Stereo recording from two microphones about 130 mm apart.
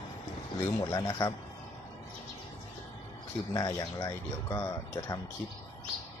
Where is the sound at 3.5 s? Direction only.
25° left (ahead or behind).